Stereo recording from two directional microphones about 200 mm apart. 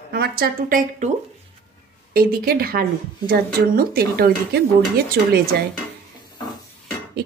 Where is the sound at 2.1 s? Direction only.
50° right (ahead or behind).